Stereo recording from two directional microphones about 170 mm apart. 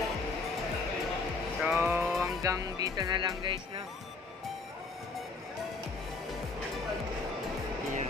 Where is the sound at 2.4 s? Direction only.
20° right (ahead or behind).